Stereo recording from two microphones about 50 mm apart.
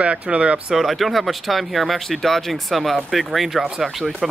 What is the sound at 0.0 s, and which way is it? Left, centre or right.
Speech, right.